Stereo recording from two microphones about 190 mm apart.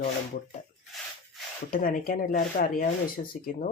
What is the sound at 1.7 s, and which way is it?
Speech, 50° left (ahead or behind).